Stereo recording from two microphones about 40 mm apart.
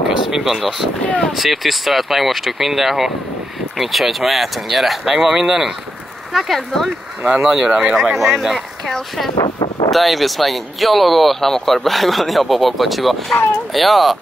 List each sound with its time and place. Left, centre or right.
0.3 s speech: centre
1.0 s speech: left
1.3 s speech: centre
5.1 s speech: centre
6.3 s speech: centre
7.4 s speech: centre
8.0 s speech: centre